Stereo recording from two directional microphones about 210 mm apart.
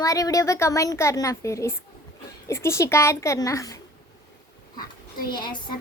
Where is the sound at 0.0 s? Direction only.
15° left (ahead or behind).